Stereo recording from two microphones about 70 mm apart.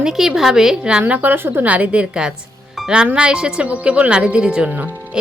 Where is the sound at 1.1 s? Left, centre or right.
Right.